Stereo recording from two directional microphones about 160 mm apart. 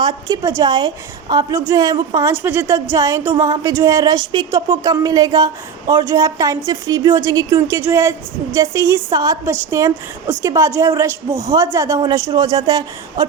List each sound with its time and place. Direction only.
0.0 s a woman's voice: 25° right (ahead or behind)